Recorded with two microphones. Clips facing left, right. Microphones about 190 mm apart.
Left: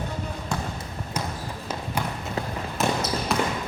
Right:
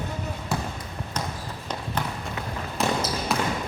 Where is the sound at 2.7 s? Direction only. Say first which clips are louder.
Even; centre (ahead or behind).